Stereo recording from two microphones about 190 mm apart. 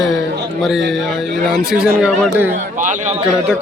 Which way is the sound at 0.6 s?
Centre (ahead or behind).